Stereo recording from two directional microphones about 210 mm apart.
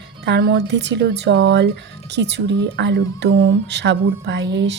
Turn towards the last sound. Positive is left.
turn(degrees=-55)  # may be behind; listen again after turning